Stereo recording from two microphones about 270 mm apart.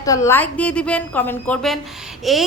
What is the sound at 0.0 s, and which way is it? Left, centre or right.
A woman's voice, centre.